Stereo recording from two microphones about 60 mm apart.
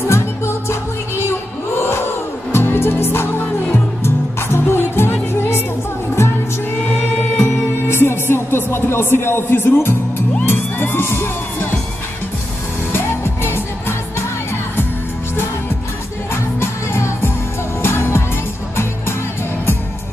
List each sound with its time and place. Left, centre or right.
0.1 s music: left
1.8 s crowd: left
2.5 s music: left
7.3 s music: left
12.9 s music: left
16.5 s music: left